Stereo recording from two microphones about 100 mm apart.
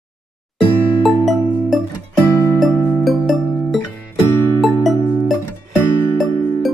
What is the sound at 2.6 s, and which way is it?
Music, centre (ahead or behind).